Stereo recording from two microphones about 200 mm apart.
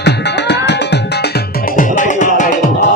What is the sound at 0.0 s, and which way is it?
Music, 60° left (ahead or behind).